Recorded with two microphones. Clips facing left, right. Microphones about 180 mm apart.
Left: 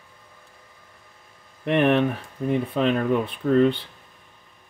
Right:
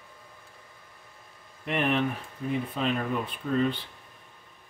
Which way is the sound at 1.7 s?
65° left (ahead or behind).